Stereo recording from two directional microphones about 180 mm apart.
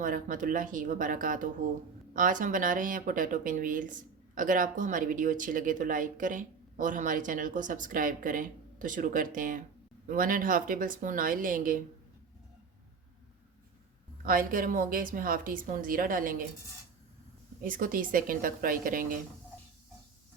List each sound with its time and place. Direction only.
0.0 s speech: 45° right (ahead or behind)
14.3 s speech: 50° right (ahead or behind)
17.6 s speech: 50° right (ahead or behind)